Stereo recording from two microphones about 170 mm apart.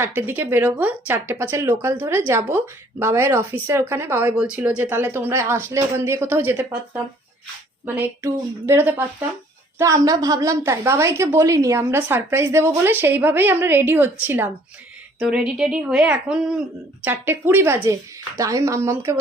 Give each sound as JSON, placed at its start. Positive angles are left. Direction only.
{"t": 0.0, "sound": "speech", "side_deg": -15}